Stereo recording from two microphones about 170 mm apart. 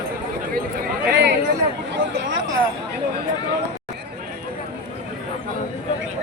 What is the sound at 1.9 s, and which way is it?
Chatter, 75° right (ahead or behind).